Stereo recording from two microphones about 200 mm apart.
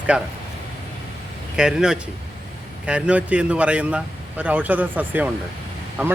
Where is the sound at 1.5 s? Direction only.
5° right (ahead or behind).